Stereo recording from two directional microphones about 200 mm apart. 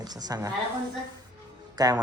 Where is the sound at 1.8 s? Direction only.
20° right (ahead or behind).